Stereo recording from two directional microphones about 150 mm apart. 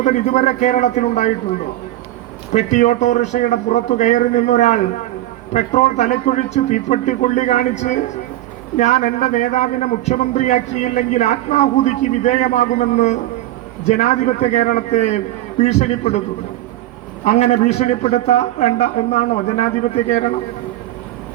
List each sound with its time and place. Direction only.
0.0 s a man's voice: 55° left (ahead or behind)
2.5 s a man's voice: 50° left (ahead or behind)
17.2 s a man's voice: 50° left (ahead or behind)